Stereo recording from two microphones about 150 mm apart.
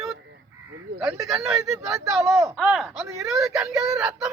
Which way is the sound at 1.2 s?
Centre (ahead or behind).